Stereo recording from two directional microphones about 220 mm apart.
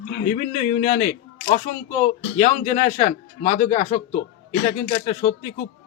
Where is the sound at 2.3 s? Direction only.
30° left (ahead or behind).